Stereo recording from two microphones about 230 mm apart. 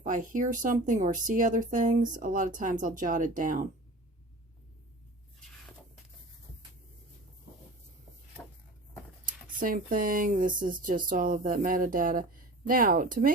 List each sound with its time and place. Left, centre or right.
0.0 s speech: right
9.2 s speech: right